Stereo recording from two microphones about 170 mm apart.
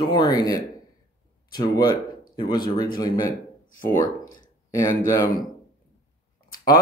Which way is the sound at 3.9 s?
20° left (ahead or behind).